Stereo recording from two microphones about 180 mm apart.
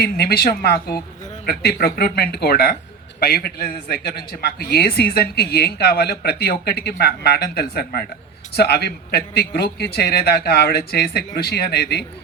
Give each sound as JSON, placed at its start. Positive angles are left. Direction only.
{"t": 0.0, "sound": "a man's voice", "side_deg": 60}